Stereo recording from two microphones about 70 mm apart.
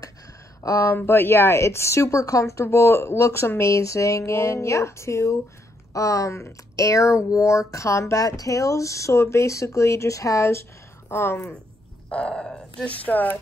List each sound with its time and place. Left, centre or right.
0.6 s speech: left
0.9 s speech: left
12.1 s grunt: centre
12.8 s a woman's voice: left